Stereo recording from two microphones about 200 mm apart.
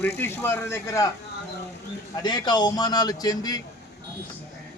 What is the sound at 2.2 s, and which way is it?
A man's voice, 20° left (ahead or behind).